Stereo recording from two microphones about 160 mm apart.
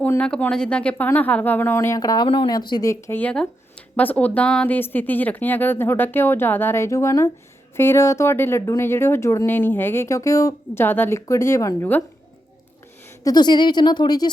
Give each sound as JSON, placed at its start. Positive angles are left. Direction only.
{"t": 0.0, "sound": "speech", "side_deg": 10}
{"t": 13.2, "sound": "speech", "side_deg": 25}